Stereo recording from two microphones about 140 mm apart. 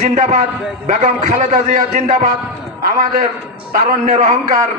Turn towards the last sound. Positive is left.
turn(degrees=-60)  # may be behind; listen again after turning